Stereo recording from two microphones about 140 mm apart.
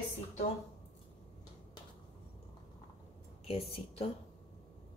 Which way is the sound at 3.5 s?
45° left (ahead or behind).